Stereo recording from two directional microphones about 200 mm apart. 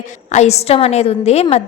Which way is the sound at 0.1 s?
35° left (ahead or behind).